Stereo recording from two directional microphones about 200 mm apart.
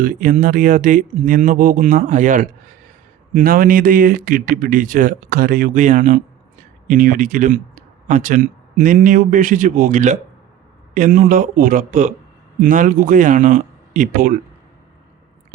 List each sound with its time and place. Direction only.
0.0 s speech: 40° right (ahead or behind)